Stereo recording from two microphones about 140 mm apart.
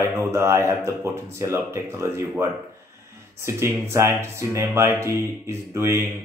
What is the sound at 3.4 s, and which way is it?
Speech, 20° right (ahead or behind).